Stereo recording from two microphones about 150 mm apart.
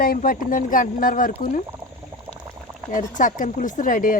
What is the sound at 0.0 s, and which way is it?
Speech, 70° left (ahead or behind).